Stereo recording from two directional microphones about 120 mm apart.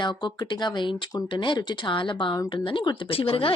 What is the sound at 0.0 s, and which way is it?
Speech, 40° left (ahead or behind).